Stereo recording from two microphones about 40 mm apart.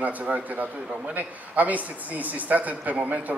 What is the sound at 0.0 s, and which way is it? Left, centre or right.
A woman's voice, right.